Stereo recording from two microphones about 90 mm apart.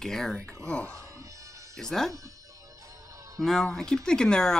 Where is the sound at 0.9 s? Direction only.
35° right (ahead or behind).